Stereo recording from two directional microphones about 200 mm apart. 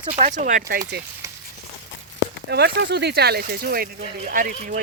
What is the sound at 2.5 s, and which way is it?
Speech, 55° right (ahead or behind).